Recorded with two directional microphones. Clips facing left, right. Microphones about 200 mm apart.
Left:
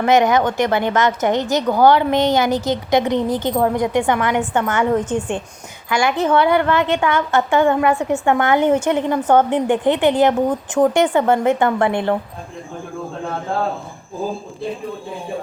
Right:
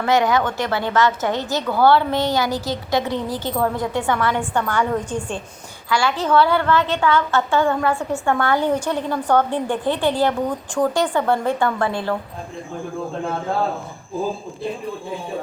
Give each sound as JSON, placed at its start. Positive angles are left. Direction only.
{"t": 0.0, "sound": "a woman's voice", "side_deg": 20}